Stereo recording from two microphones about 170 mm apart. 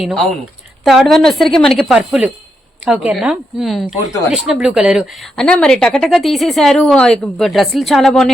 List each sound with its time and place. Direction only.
0.0 s speech: centre (ahead or behind)